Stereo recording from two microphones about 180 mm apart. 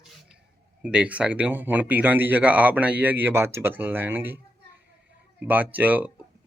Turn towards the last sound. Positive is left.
turn(degrees=-10)  # may be behind; listen again after turning